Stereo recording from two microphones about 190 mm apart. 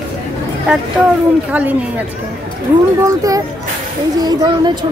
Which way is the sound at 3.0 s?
20° right (ahead or behind).